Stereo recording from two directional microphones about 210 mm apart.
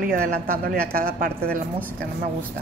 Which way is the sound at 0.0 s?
45° right (ahead or behind).